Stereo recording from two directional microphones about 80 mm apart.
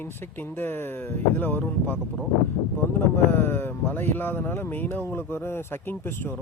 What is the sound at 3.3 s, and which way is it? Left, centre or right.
Speech, left.